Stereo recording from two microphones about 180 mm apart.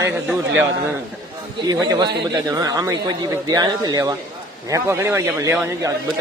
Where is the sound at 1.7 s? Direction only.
20° right (ahead or behind).